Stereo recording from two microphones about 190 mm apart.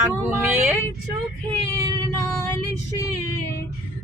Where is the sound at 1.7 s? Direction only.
20° right (ahead or behind).